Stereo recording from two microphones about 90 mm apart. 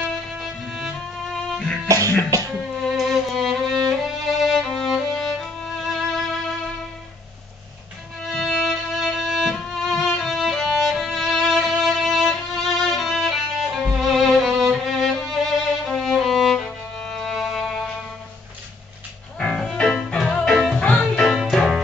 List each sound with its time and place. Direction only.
0.4 s violin: centre (ahead or behind)
1.9 s music: 40° right (ahead or behind)
3.0 s violin: centre (ahead or behind)
8.2 s violin: centre (ahead or behind)
19.3 s music: 5° left (ahead or behind)